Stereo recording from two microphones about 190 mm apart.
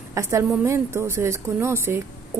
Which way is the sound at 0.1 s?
15° right (ahead or behind).